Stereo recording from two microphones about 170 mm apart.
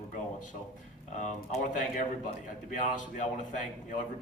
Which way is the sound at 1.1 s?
45° left (ahead or behind).